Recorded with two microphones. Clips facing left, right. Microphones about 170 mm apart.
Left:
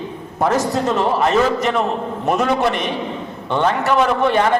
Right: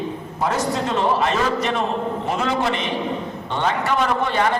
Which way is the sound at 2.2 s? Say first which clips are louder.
Left 7 dB; 60° left (ahead or behind).